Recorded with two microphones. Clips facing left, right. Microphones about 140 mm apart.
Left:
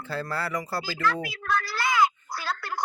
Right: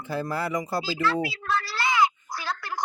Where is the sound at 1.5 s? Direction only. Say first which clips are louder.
Left 3 dB; 25° right (ahead or behind).